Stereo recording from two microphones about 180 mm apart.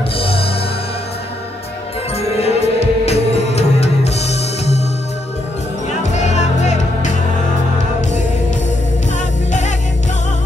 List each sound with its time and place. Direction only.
0.2 s music: 30° left (ahead or behind)
2.1 s music: 35° left (ahead or behind)
6.1 s music: 40° left (ahead or behind)
9.5 s music: 40° left (ahead or behind)